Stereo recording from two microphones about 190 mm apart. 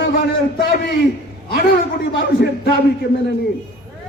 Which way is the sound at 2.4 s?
55° left (ahead or behind).